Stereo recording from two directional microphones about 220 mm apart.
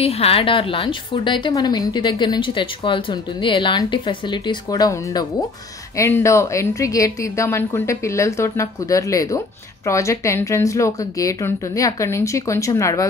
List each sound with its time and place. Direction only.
0.0 s a woman's voice: 25° left (ahead or behind)